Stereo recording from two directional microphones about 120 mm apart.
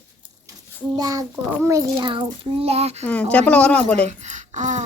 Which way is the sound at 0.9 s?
30° right (ahead or behind).